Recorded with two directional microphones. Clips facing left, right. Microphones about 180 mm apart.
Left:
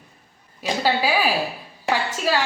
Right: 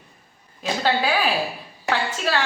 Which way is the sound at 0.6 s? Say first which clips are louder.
Left 1 dB; 10° left (ahead or behind).